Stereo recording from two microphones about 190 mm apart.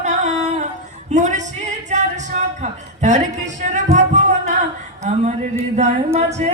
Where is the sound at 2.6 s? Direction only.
40° right (ahead or behind).